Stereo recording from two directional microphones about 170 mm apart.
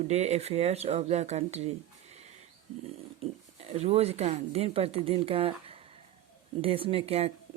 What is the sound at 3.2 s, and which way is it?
Speech, 40° right (ahead or behind).